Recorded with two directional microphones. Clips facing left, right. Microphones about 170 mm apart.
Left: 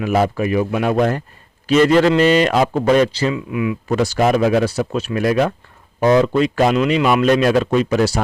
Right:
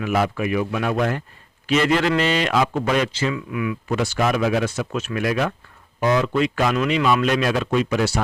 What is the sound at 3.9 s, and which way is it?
Speech, 35° left (ahead or behind).